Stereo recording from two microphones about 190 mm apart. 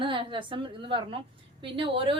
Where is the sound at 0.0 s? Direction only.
25° right (ahead or behind).